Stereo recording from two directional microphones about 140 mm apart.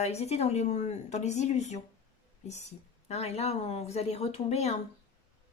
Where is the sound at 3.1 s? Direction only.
50° left (ahead or behind).